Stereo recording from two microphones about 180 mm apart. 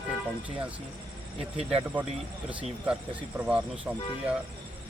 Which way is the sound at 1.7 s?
10° right (ahead or behind).